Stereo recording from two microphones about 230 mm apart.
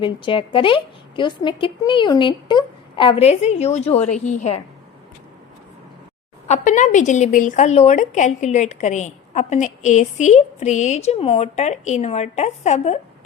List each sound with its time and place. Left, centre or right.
0.0 s a woman's voice: left
6.5 s a woman's voice: left